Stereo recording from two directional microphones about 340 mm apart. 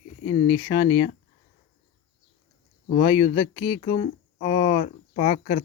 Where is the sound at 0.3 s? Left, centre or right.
Centre.